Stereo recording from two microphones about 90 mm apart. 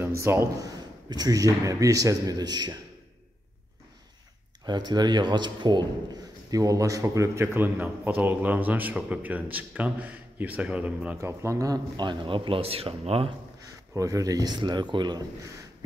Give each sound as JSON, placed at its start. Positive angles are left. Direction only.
{"t": 0.0, "sound": "a man's voice", "side_deg": -30}
{"t": 1.1, "sound": "speech", "side_deg": -45}
{"t": 4.6, "sound": "speech", "side_deg": -55}
{"t": 6.5, "sound": "speech", "side_deg": -40}
{"t": 7.5, "sound": "a man's voice", "side_deg": -25}
{"t": 11.1, "sound": "speech", "side_deg": -30}
{"t": 12.0, "sound": "speech", "side_deg": -65}
{"t": 13.9, "sound": "speech", "side_deg": -40}